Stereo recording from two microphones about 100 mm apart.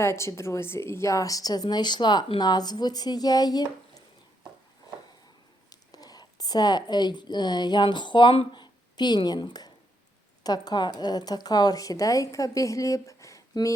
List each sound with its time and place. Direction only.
0.0 s speech: 25° left (ahead or behind); by 4.0 s 40° left (ahead or behind)
5.9 s a woman's voice: 40° left (ahead or behind)
8.5 s a sound: 45° left (ahead or behind)
10.4 s speech: 40° left (ahead or behind)